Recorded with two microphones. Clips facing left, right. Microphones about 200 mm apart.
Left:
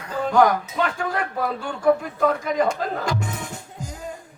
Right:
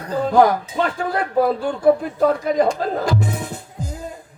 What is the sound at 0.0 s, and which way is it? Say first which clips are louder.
Speech: right 3 dB; 35° right (ahead or behind).